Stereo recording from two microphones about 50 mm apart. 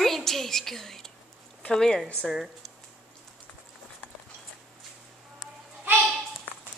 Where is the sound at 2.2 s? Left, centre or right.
Centre.